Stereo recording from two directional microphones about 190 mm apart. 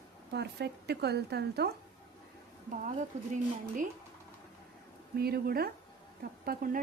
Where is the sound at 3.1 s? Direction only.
35° right (ahead or behind).